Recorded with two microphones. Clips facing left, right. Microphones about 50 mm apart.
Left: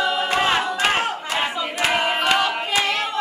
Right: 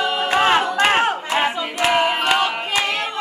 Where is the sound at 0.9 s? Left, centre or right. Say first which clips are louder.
Right 5 dB; right.